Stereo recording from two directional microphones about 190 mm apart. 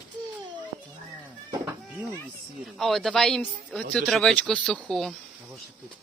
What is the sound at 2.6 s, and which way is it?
Speech, centre (ahead or behind).